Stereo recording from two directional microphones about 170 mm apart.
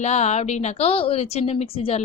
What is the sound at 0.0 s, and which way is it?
A woman's voice, 40° left (ahead or behind).